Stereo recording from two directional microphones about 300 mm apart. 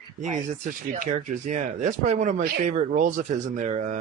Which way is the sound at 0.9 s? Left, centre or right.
Right.